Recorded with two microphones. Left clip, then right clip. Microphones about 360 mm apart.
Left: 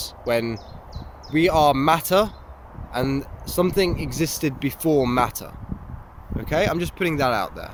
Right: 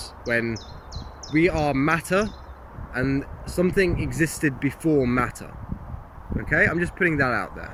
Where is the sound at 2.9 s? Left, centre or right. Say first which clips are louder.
Left 1 dB; left.